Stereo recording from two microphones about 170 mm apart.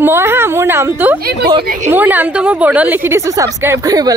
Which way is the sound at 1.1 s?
65° right (ahead or behind).